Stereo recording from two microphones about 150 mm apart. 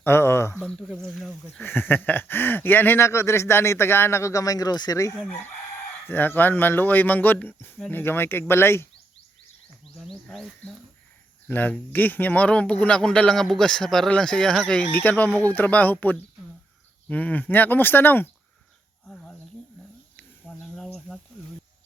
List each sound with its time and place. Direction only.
0.0 s speech: 15° left (ahead or behind)
0.6 s speech: 5° left (ahead or behind)
1.5 s speech: 15° left (ahead or behind)
9.8 s speech: centre (ahead or behind)
19.0 s a sound: 5° left (ahead or behind)
20.1 s snake: 10° left (ahead or behind)